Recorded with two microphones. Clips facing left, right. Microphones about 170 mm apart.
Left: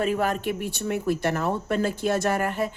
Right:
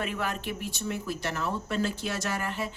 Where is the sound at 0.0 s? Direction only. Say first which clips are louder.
Left 8 dB; 45° left (ahead or behind).